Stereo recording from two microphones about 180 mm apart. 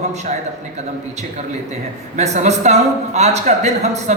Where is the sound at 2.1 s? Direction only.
40° right (ahead or behind).